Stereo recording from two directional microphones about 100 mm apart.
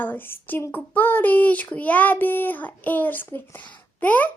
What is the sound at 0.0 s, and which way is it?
A child's voice, 20° left (ahead or behind).